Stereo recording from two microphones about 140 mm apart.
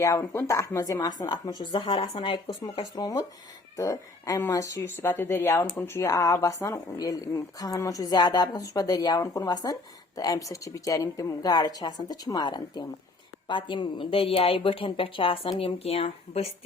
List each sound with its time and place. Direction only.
0.0 s speech: 20° left (ahead or behind); by 2.8 s 40° left (ahead or behind)
2.9 s a woman's voice: 25° left (ahead or behind); by 16.5 s 45° left (ahead or behind)